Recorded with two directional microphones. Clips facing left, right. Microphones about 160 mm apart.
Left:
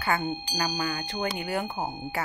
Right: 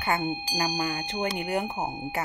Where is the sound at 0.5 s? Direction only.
30° right (ahead or behind).